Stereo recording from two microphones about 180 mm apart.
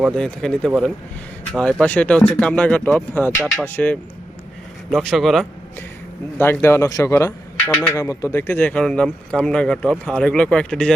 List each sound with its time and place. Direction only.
0.2 s speech: 5° left (ahead or behind)
6.4 s speech: 10° left (ahead or behind)